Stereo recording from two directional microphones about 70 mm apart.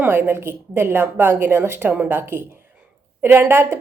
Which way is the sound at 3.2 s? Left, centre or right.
Right.